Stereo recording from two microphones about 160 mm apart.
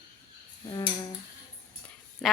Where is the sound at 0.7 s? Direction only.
25° left (ahead or behind).